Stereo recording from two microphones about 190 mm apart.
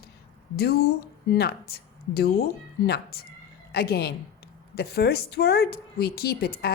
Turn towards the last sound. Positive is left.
turn(degrees=55)  # may be behind; listen again after turning